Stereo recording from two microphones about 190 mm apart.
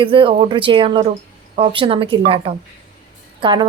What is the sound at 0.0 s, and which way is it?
A woman's voice, 25° right (ahead or behind).